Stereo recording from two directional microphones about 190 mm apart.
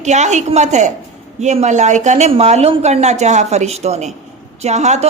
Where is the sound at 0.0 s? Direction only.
40° right (ahead or behind).